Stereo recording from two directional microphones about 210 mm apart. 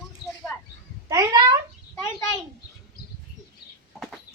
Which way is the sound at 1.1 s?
15° right (ahead or behind).